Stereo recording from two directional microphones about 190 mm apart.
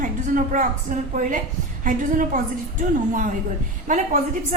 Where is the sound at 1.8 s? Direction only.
45° right (ahead or behind).